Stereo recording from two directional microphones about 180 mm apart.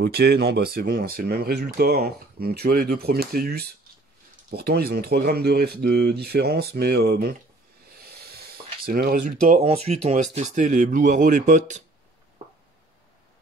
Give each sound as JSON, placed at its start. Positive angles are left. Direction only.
{"t": 0.0, "sound": "speech", "side_deg": -60}
{"t": 8.0, "sound": "a sound", "side_deg": -60}
{"t": 8.8, "sound": "speech", "side_deg": -55}
{"t": 9.7, "sound": "speech", "side_deg": -35}